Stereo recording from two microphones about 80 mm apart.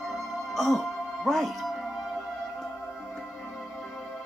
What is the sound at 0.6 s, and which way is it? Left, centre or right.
Music, centre.